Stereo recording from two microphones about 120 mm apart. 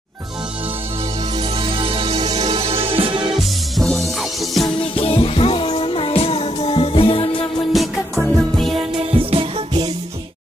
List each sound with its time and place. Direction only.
1.6 s music: 50° right (ahead or behind)
3.7 s music: centre (ahead or behind)
4.9 s music: 50° left (ahead or behind)
7.7 s music: centre (ahead or behind)
9.1 s music: 50° right (ahead or behind)